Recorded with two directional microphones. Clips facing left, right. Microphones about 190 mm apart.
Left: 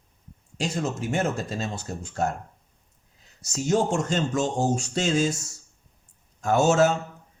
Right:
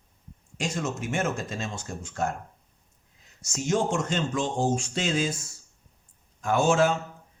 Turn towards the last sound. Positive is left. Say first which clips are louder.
# left 2 dB
turn(degrees=40)  # may be behind; listen again after turning